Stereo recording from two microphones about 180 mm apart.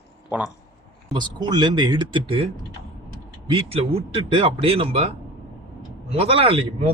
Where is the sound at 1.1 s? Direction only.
25° right (ahead or behind).